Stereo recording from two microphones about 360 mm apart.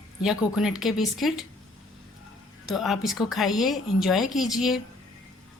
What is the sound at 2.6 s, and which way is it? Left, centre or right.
A woman's voice, centre.